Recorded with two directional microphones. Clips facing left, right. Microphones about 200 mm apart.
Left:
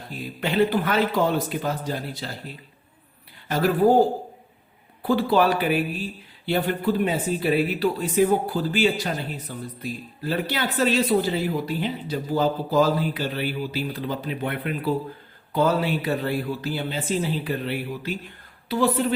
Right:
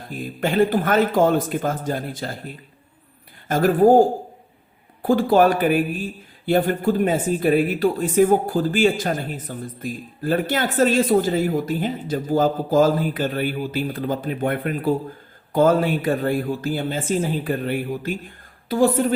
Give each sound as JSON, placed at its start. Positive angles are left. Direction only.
{"t": 0.1, "sound": "speech", "side_deg": -50}